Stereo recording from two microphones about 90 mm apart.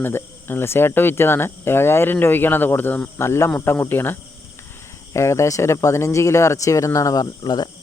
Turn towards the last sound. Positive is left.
turn(degrees=50)  # may be behind; listen again after turning